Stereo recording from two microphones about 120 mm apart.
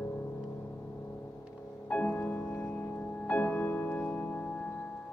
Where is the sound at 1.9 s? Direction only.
15° left (ahead or behind).